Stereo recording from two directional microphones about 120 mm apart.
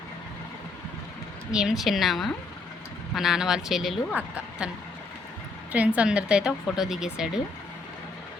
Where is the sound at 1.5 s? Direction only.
5° right (ahead or behind).